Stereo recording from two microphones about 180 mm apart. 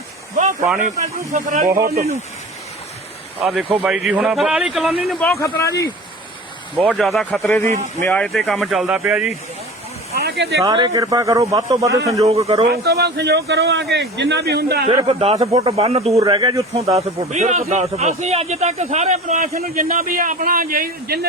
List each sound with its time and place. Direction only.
0.8 s speech: 45° right (ahead or behind)
3.4 s speech: centre (ahead or behind)
5.4 s speech: 15° left (ahead or behind)
6.7 s speech: centre (ahead or behind)
10.1 s a sound: 60° right (ahead or behind)
10.6 s a man's voice: 25° right (ahead or behind)
12.7 s a man's voice: 60° right (ahead or behind)
15.0 s speech: 35° right (ahead or behind)
16.1 s a man's voice: 20° right (ahead or behind)
16.7 s speech: 35° right (ahead or behind); by 21.2 s 55° right (ahead or behind)